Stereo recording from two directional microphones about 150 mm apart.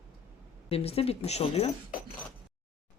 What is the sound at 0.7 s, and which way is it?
Speech, 40° left (ahead or behind).